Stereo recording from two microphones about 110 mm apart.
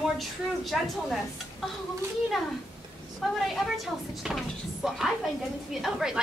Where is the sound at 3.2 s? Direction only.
Centre (ahead or behind).